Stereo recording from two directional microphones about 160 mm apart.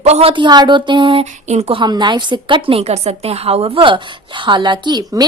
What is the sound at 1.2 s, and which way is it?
Speech, 45° right (ahead or behind).